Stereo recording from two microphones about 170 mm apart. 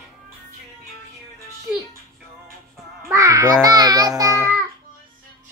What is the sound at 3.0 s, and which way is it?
Music, 15° right (ahead or behind).